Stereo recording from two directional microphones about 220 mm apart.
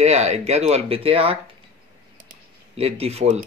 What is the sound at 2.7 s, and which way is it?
Speech, 25° right (ahead or behind).